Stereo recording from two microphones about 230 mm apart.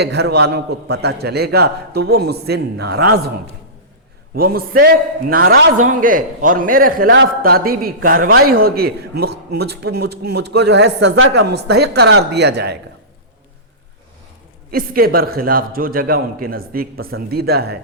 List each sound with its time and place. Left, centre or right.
0.0 s a man's voice: right
4.4 s a man's voice: right
14.7 s a man's voice: right